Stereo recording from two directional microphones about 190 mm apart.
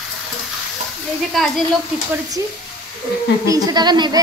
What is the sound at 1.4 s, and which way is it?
Speech, centre (ahead or behind).